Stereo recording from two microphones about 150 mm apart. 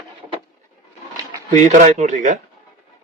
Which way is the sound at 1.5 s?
55° right (ahead or behind).